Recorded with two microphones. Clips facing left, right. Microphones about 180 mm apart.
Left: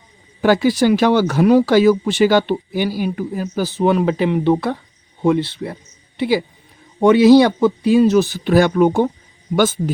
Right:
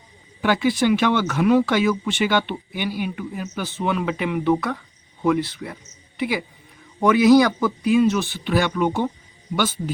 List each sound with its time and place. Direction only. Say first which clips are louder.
0.4 s speech: left 5 dB; 40° left (ahead or behind)